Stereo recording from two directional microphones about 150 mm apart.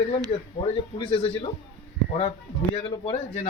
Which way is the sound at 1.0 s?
35° left (ahead or behind).